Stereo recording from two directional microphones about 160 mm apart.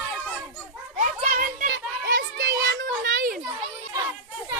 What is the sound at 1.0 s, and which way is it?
Children playing, 50° right (ahead or behind).